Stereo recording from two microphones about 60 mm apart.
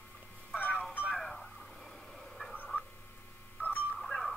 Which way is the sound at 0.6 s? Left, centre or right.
Left.